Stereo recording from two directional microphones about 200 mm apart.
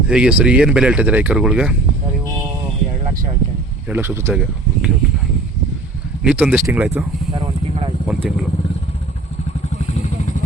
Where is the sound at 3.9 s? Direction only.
10° right (ahead or behind).